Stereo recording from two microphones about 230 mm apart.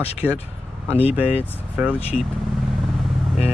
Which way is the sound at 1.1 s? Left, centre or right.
Centre.